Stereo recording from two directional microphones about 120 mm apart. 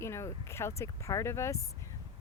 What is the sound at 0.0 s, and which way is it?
Speech, 25° left (ahead or behind).